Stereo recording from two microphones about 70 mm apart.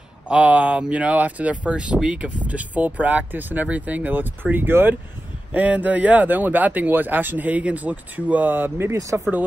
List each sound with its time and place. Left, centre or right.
0.3 s speech: centre